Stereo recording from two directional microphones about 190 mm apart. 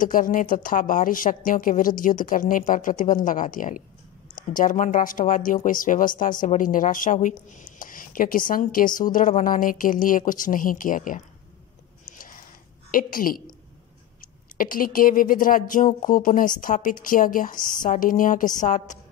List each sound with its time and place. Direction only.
0.0 s speech: 45° left (ahead or behind)
12.1 s a sound: 45° left (ahead or behind)
12.9 s speech: 50° left (ahead or behind)
14.6 s a woman's voice: 45° left (ahead or behind)